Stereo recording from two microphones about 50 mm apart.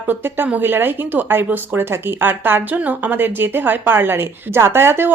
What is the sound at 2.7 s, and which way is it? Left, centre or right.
A woman's voice, right.